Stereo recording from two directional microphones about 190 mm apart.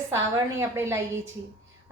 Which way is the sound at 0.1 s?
15° right (ahead or behind).